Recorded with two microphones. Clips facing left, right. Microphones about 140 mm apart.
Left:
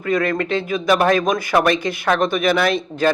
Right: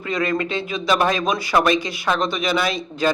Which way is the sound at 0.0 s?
55° left (ahead or behind).